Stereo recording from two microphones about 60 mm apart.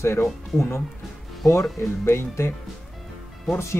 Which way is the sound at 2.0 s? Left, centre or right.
Left.